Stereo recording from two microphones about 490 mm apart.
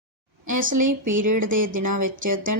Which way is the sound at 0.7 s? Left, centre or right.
Right.